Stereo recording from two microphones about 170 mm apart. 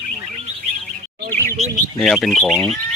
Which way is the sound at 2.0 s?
Centre (ahead or behind).